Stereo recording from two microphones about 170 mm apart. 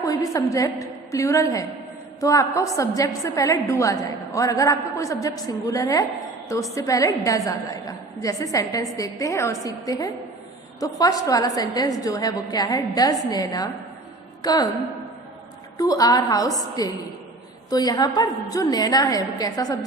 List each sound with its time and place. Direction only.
0.0 s a woman's voice: 20° left (ahead or behind)
15.8 s a woman's voice: 20° left (ahead or behind)